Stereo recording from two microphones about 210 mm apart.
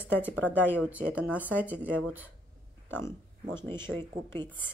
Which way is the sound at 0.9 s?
5° right (ahead or behind).